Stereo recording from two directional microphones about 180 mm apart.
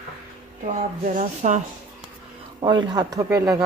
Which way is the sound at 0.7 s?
45° right (ahead or behind).